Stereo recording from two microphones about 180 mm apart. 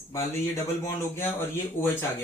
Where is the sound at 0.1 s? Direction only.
15° left (ahead or behind).